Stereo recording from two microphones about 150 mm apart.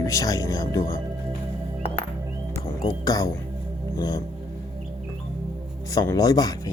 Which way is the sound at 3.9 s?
25° left (ahead or behind).